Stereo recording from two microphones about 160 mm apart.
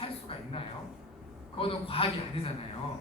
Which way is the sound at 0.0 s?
35° left (ahead or behind).